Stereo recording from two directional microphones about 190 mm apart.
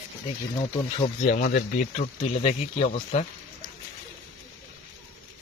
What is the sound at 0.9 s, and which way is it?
Speech, 40° left (ahead or behind).